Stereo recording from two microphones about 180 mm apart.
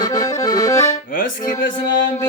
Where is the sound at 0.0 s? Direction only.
20° left (ahead or behind).